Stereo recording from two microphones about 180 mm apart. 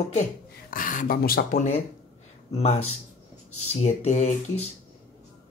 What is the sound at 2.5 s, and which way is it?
Speech, 35° left (ahead or behind).